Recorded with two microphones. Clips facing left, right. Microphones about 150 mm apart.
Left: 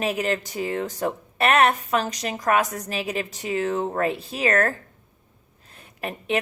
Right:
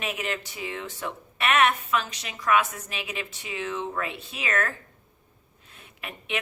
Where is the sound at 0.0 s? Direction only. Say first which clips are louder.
Left 7 dB; 40° left (ahead or behind).